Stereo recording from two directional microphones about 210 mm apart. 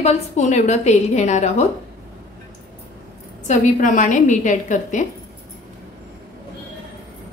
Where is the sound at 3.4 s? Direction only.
40° left (ahead or behind).